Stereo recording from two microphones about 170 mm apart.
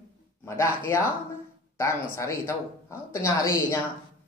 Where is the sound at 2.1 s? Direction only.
15° left (ahead or behind).